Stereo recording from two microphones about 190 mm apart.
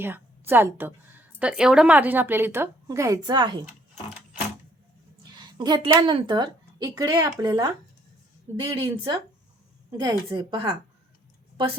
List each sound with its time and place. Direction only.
0.0 s a woman's voice: 10° right (ahead or behind)
5.4 s a woman's voice: 20° right (ahead or behind)